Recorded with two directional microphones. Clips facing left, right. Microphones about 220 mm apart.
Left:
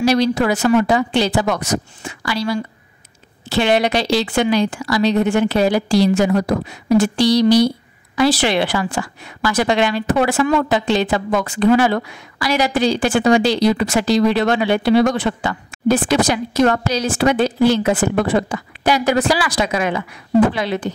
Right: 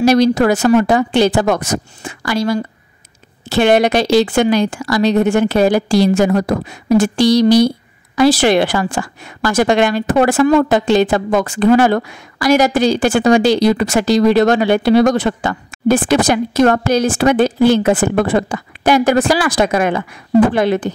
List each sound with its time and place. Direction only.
0.0 s a woman's voice: 45° right (ahead or behind)